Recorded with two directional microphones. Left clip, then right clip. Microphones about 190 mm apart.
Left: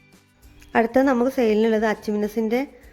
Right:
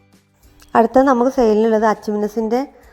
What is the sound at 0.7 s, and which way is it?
A woman's voice, 25° right (ahead or behind).